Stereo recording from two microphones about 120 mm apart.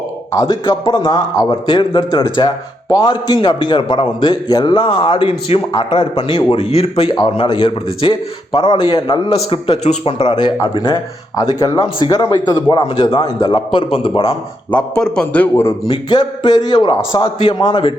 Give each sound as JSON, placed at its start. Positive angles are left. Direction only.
{"t": 0.3, "sound": "a man's voice", "side_deg": 35}
{"t": 5.7, "sound": "a man's voice", "side_deg": 45}
{"t": 10.8, "sound": "a man's voice", "side_deg": 45}
{"t": 11.3, "sound": "a man's voice", "side_deg": 30}
{"t": 13.2, "sound": "a man's voice", "side_deg": 35}
{"t": 14.7, "sound": "a man's voice", "side_deg": 10}
{"t": 15.9, "sound": "a man's voice", "side_deg": 35}